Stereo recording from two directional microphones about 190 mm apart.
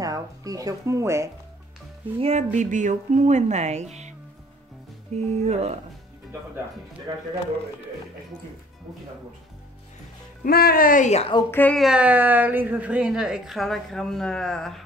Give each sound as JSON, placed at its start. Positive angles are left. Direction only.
{"t": 0.0, "sound": "speech", "side_deg": -20}
{"t": 2.1, "sound": "speech", "side_deg": -35}
{"t": 5.1, "sound": "speech", "side_deg": -35}
{"t": 10.4, "sound": "speech", "side_deg": 50}
{"t": 11.5, "sound": "a woman's voice", "side_deg": 5}